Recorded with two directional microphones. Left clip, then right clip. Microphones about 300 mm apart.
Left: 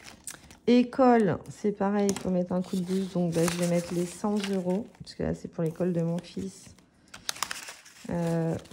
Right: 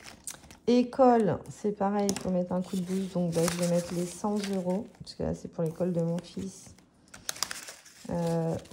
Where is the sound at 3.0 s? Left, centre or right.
Left.